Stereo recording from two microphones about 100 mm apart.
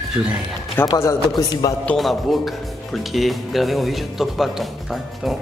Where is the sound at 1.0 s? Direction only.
30° left (ahead or behind).